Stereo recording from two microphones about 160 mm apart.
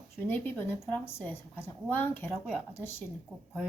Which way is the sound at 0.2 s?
10° left (ahead or behind).